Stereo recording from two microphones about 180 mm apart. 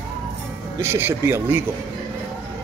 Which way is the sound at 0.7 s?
15° right (ahead or behind).